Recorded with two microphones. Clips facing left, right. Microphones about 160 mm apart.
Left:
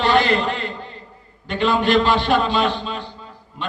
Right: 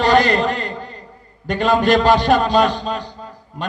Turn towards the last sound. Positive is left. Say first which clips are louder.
# right 3 dB
turn(degrees=-40)  # may be behind; listen again after turning